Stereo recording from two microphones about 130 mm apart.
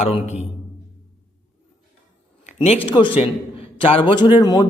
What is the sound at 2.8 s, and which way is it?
A man's voice, 40° left (ahead or behind).